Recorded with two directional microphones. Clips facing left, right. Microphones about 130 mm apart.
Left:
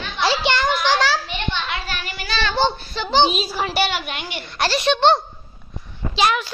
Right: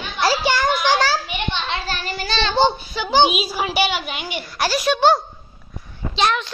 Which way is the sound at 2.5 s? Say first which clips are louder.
Right 4 dB; 10° right (ahead or behind).